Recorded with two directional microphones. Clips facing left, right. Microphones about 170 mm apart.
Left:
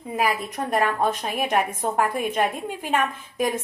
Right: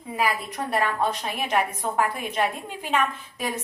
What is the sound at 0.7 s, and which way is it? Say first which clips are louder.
A woman's voice: left 2 dB; 45° left (ahead or behind).